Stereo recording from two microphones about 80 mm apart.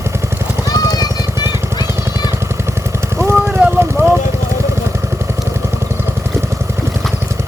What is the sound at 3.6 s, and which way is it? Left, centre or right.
Vehicle, centre.